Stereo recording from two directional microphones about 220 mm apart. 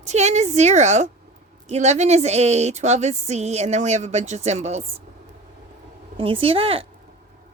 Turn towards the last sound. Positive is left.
turn(degrees=-25)  # may be behind; listen again after turning